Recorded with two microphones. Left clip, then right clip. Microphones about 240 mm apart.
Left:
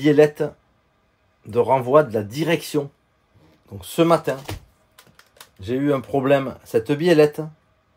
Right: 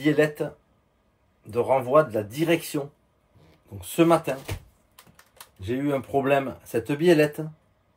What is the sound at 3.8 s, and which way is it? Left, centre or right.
Speech, left.